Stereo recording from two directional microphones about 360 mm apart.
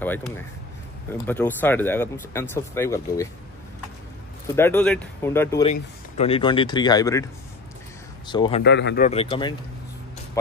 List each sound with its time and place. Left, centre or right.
0.0 s speech: centre
4.6 s speech: centre
8.3 s speech: centre
8.6 s speech: left; by 9.6 s centre